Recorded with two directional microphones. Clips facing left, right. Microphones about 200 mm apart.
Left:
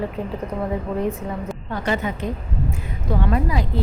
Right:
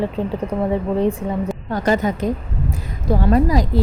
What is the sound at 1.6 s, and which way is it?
Speech, 40° right (ahead or behind).